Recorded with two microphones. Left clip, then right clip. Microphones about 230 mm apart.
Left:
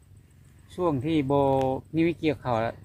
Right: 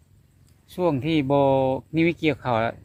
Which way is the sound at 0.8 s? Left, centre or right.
Right.